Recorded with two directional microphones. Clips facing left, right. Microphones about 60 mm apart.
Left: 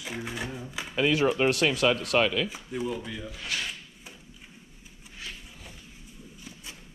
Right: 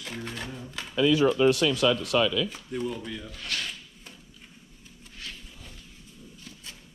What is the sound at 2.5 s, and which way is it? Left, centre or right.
Speech, centre.